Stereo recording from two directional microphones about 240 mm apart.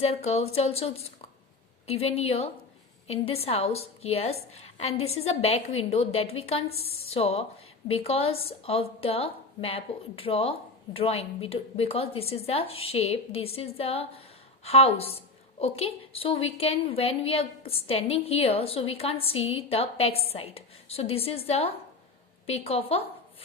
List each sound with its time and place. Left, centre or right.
0.0 s a woman's voice: left